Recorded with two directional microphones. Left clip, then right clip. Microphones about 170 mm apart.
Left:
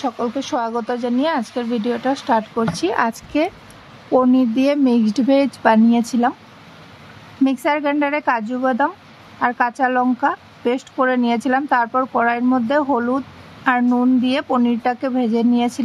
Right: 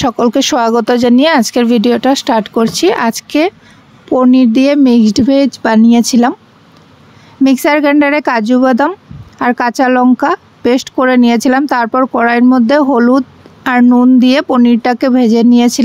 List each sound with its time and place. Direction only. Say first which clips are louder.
0.0 s speech: right 11 dB; 55° right (ahead or behind); by 5.8 s 35° right (ahead or behind)
5.9 s speech: right 8 dB; 50° right (ahead or behind)
7.4 s speech: right 9 dB; 50° right (ahead or behind)